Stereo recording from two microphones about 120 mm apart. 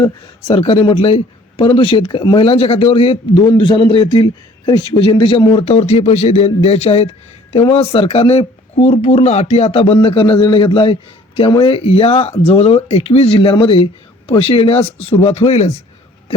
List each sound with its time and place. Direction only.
0.0 s a man's voice: 45° left (ahead or behind)
3.6 s a man's voice: 40° left (ahead or behind); by 15.7 s 65° left (ahead or behind)